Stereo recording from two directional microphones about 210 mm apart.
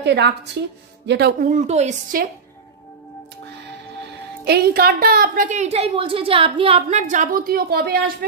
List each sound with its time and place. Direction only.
0.0 s a woman's voice: 55° right (ahead or behind)
1.5 s a woman's voice: 30° right (ahead or behind)
4.5 s a woman's voice: 45° right (ahead or behind)